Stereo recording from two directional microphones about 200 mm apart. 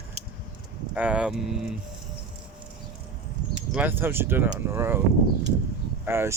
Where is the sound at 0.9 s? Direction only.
5° right (ahead or behind).